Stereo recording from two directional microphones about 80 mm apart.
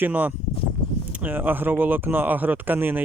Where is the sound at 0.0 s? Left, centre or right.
Right.